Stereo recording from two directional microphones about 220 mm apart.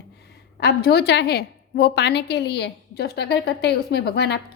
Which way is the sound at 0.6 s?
45° left (ahead or behind).